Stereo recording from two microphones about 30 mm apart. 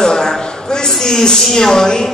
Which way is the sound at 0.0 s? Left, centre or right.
Left.